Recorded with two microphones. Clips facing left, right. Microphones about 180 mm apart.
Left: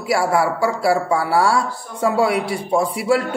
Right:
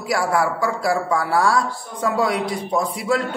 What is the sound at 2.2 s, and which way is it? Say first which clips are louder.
Speech: left 2 dB; 5° left (ahead or behind).